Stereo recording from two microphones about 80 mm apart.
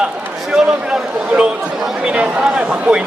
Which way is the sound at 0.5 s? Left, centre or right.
Centre.